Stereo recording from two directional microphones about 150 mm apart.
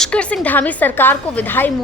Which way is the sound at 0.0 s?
10° left (ahead or behind).